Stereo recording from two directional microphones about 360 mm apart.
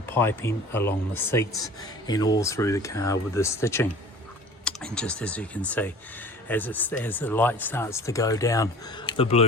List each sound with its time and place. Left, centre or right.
0.0 s speech: centre